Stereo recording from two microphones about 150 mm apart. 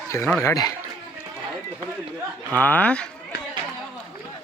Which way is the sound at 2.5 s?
10° left (ahead or behind).